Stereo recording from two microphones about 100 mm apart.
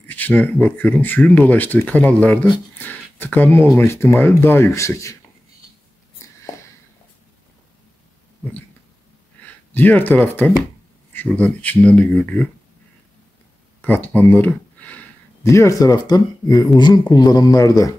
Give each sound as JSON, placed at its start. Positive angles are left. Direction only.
{"t": 0.1, "sound": "speech", "side_deg": 15}
{"t": 9.4, "sound": "speech", "side_deg": 15}
{"t": 13.7, "sound": "speech", "side_deg": 15}
{"t": 15.4, "sound": "speech", "side_deg": 30}